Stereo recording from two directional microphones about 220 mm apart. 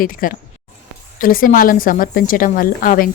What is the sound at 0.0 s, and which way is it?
Speech, 40° left (ahead or behind).